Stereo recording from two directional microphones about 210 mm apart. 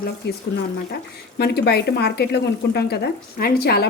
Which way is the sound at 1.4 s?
50° left (ahead or behind).